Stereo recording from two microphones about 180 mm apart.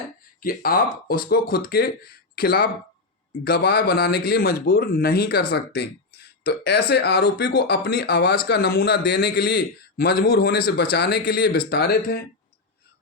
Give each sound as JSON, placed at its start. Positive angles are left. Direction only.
{"t": 0.4, "sound": "speech", "side_deg": 55}